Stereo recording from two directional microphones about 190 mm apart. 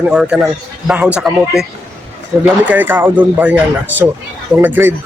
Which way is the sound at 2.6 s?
10° right (ahead or behind).